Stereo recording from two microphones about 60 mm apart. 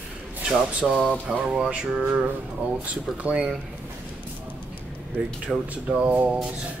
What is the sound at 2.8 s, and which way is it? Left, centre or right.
Speech, right.